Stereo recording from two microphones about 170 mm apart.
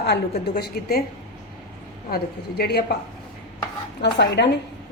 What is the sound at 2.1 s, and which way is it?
Speech, 70° left (ahead or behind).